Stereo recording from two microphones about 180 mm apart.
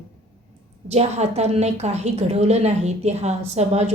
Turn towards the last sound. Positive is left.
turn(degrees=-35)  # may be behind; listen again after turning